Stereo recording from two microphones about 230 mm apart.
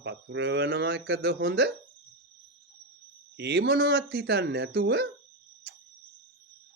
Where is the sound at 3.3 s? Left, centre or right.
Right.